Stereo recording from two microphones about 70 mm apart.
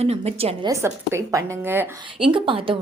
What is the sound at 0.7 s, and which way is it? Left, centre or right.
A woman's voice, right.